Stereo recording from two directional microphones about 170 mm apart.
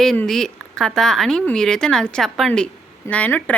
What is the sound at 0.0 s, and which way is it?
Speech, centre (ahead or behind).